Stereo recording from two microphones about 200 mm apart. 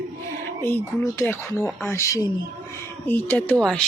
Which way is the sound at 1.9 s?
15° left (ahead or behind).